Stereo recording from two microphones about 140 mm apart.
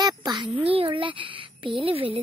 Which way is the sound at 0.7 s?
40° right (ahead or behind).